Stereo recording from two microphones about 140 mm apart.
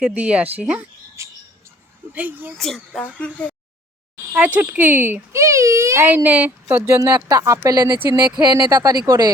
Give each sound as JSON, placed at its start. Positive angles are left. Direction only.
{"t": 0.0, "sound": "speech", "side_deg": -10}
{"t": 1.2, "sound": "bird", "side_deg": -20}
{"t": 2.1, "sound": "speech", "side_deg": -10}
{"t": 2.6, "sound": "a woman's voice", "side_deg": 5}
{"t": 4.3, "sound": "a child's voice", "side_deg": -10}
{"t": 7.9, "sound": "speech", "side_deg": -15}
{"t": 8.4, "sound": "a child's voice", "side_deg": -25}